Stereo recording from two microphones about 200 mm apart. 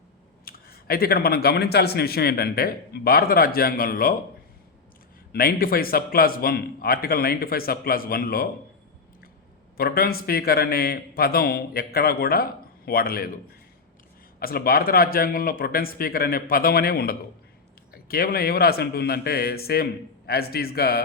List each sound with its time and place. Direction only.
0.4 s speech: 50° left (ahead or behind)
5.3 s speech: 50° left (ahead or behind)
9.7 s speech: 50° left (ahead or behind)
14.3 s speech: 50° left (ahead or behind)